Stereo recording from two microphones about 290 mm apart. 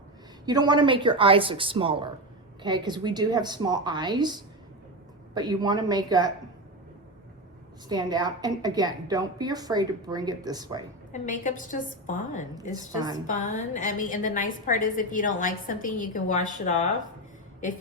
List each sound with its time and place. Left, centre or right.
0.4 s a woman's voice: centre
7.9 s a woman's voice: centre
11.1 s a woman's voice: left
12.7 s a woman's voice: centre
13.2 s a woman's voice: left